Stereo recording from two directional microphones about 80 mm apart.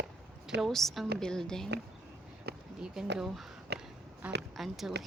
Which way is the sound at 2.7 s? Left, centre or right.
Centre.